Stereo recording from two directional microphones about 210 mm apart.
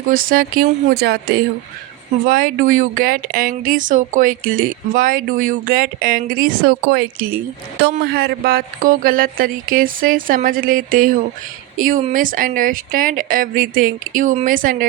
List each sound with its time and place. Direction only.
0.1 s speech: 40° right (ahead or behind)